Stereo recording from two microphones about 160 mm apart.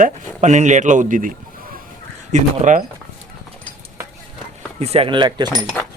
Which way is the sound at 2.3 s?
50° right (ahead or behind).